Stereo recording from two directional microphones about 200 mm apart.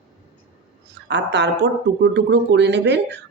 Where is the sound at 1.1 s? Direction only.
60° right (ahead or behind).